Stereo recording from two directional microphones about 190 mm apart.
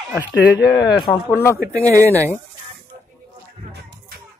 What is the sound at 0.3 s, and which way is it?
Speech, 70° left (ahead or behind).